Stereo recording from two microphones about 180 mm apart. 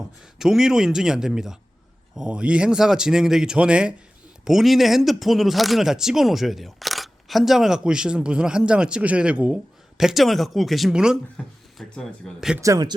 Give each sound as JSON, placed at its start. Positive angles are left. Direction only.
{"t": 0.3, "sound": "speech", "side_deg": 0}
{"t": 12.6, "sound": "speech", "side_deg": -15}